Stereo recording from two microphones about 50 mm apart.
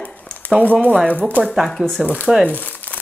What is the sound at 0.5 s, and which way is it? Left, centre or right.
Speech, centre.